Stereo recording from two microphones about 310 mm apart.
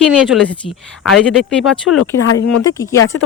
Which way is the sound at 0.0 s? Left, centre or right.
Centre.